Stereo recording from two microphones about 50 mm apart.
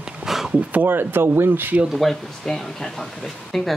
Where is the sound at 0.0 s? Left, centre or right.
Centre.